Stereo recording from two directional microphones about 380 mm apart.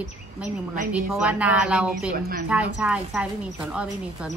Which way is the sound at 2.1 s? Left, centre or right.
Right.